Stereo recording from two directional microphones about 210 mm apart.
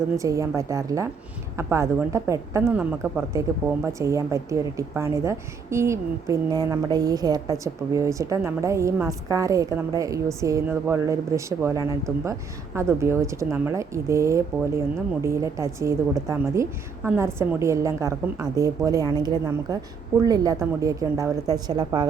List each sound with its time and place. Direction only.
0.2 s a woman's voice: 15° right (ahead or behind)